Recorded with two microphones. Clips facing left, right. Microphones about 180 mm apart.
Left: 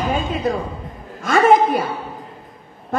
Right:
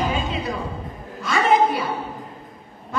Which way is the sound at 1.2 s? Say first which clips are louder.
Left 4 dB; 50° left (ahead or behind).